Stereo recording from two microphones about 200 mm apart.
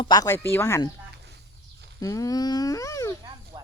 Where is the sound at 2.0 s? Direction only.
15° left (ahead or behind).